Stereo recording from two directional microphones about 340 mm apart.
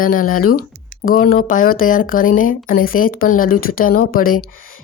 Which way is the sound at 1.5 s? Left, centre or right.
Left.